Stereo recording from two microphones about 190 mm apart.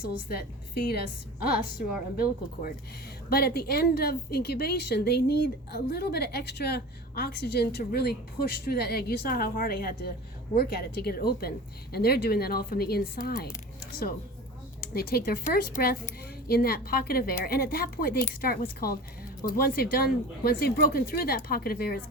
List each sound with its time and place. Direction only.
0.3 s a woman's voice: 55° left (ahead or behind)
3.2 s a woman's voice: 55° left (ahead or behind)
14.8 s a woman's voice: 55° left (ahead or behind)